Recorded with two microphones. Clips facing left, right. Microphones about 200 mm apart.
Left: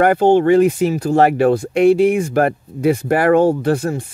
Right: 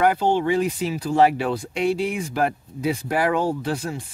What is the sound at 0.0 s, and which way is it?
Speech, 55° left (ahead or behind).